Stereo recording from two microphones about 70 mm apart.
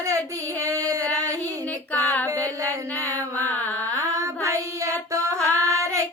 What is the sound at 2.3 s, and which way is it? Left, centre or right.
Mantra, right.